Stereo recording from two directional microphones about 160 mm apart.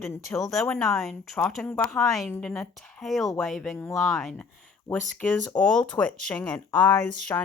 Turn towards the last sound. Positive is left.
turn(degrees=15)  # may be behind; listen again after turning